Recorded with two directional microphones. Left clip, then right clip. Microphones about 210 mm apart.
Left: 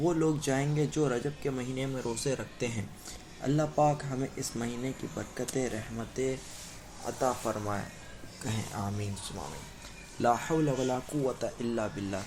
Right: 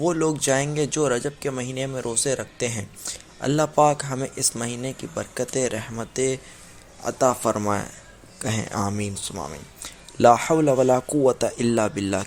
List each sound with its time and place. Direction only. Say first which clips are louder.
0.0 s speech: right 7 dB; 50° right (ahead or behind)